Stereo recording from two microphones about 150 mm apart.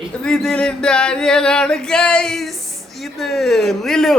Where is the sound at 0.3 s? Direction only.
5° left (ahead or behind).